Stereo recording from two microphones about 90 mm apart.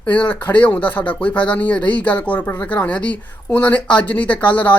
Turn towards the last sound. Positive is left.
turn(degrees=15)  # may be behind; listen again after turning